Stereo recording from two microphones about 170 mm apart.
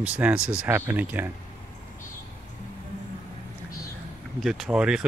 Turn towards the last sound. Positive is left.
turn(degrees=-5)  # may be behind; listen again after turning